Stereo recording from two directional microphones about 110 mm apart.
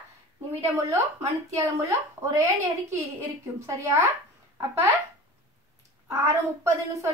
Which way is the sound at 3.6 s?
30° right (ahead or behind).